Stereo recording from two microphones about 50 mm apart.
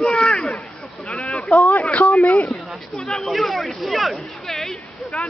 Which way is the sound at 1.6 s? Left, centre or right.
Left.